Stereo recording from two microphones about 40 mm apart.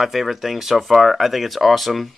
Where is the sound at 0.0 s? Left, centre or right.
Centre.